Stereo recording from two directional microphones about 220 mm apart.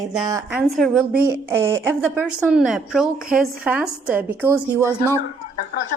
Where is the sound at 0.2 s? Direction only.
20° right (ahead or behind).